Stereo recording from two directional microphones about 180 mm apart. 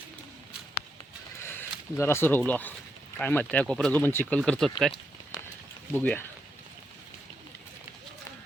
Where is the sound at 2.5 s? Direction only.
10° left (ahead or behind).